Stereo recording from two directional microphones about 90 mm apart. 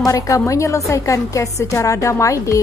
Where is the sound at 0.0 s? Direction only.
35° left (ahead or behind).